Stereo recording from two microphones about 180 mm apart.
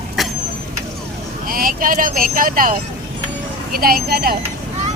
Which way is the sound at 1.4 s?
55° right (ahead or behind).